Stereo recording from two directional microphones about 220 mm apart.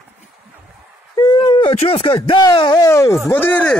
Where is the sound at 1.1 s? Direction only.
20° left (ahead or behind).